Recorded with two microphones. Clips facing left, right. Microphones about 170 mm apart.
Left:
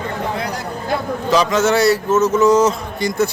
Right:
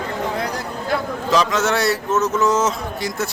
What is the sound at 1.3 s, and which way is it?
A man's voice, centre (ahead or behind).